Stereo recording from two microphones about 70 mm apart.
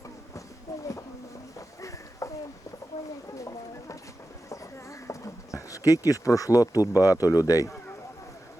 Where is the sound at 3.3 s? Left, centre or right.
Left.